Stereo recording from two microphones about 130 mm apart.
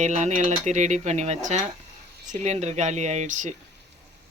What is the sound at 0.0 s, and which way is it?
Speech, 60° right (ahead or behind).